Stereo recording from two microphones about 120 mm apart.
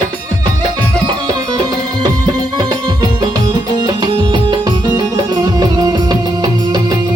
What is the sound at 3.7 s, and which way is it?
Music, 35° right (ahead or behind).